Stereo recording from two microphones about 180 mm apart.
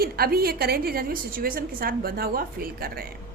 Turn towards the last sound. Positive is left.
turn(degrees=-55)  # may be behind; listen again after turning